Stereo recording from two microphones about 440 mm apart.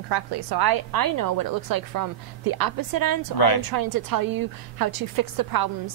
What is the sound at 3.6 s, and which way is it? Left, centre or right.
A woman's voice, right.